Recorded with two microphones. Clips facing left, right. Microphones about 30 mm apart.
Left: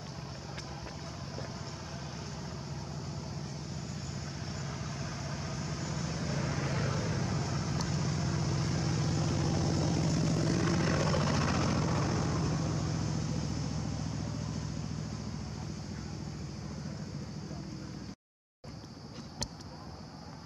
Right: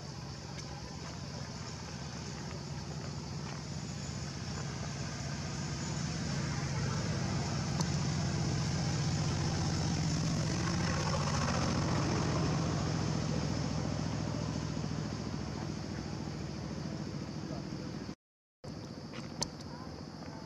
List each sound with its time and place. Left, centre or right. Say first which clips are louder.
4.5 s vehicle: left 1 dB; centre
6.6 s vehicle: left 4 dB; left
6.9 s vehicle: left 2 dB; centre
10.7 s vehicle: left 4 dB; centre
11.8 s vehicle: left 1 dB; centre